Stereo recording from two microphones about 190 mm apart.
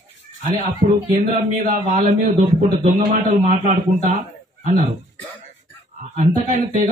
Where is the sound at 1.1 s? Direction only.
35° right (ahead or behind).